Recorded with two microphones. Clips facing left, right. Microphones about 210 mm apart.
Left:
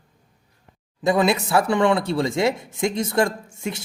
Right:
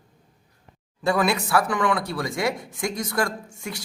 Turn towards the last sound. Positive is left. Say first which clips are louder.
# left 4 dB
turn(degrees=25)  # may be behind; listen again after turning